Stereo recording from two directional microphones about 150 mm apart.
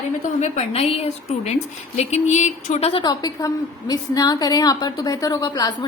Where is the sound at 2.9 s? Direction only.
30° left (ahead or behind).